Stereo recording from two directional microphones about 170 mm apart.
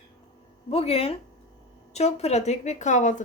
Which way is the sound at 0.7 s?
35° left (ahead or behind).